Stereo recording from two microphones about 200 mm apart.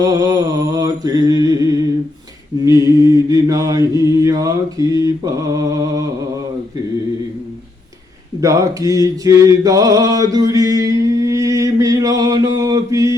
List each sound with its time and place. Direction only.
0.0 s music: 15° right (ahead or behind)
2.6 s mantra: 15° right (ahead or behind)
8.4 s a sound: 15° right (ahead or behind)